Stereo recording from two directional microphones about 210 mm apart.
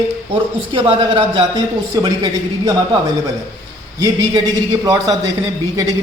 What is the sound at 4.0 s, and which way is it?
Speech, 20° right (ahead or behind).